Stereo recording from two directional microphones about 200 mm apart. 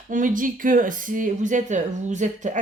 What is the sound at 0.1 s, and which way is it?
Speech, 40° right (ahead or behind).